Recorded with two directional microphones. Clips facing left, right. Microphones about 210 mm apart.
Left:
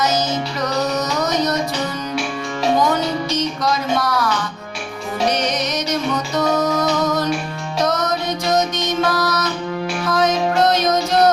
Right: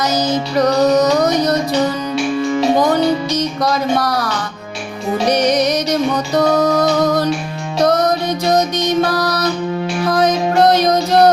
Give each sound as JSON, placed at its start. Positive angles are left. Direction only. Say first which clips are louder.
{"t": 0.8, "sound": "music", "louder": "right 7 dB", "side_deg": -35}
{"t": 3.6, "sound": "a sound", "louder": "right 5 dB", "side_deg": -35}
{"t": 5.5, "sound": "music", "louder": "right 7 dB", "side_deg": -35}